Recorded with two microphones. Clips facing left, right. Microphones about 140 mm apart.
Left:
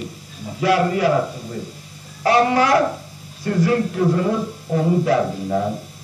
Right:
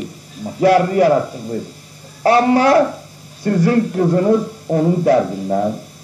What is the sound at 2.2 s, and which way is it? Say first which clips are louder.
Speech: right 4 dB; 35° right (ahead or behind).